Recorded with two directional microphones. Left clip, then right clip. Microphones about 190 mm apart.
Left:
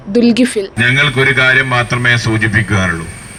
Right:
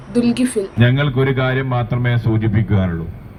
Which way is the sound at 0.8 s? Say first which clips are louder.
Left 9 dB; 15° left (ahead or behind).